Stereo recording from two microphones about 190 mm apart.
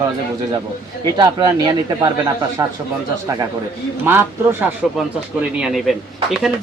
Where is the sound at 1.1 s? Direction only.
20° right (ahead or behind).